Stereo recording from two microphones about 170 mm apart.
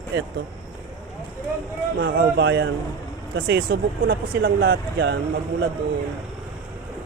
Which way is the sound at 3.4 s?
65° right (ahead or behind).